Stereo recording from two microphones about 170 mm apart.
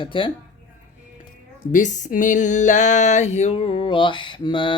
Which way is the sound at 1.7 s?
50° left (ahead or behind).